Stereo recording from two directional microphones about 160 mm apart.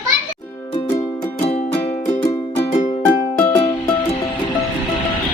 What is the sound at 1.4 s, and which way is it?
Music, 40° left (ahead or behind).